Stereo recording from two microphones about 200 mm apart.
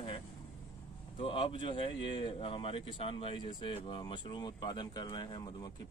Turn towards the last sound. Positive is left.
turn(degrees=25)  # may be behind; listen again after turning